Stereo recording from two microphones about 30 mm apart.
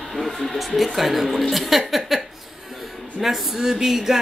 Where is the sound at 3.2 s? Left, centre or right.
Centre.